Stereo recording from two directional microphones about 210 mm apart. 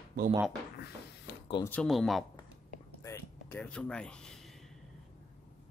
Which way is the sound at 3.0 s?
10° left (ahead or behind).